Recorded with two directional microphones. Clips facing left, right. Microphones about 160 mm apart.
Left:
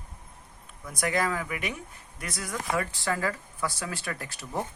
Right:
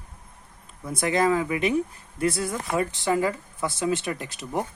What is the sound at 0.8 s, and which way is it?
Speech, 25° right (ahead or behind).